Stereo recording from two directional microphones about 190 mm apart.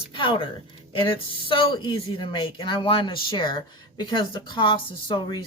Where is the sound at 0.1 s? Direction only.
25° left (ahead or behind).